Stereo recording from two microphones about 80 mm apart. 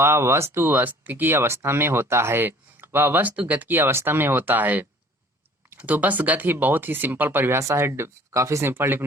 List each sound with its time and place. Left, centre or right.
0.0 s speech: right